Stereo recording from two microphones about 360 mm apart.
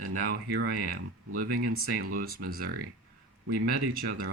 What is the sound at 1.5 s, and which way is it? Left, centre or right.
Speech, right.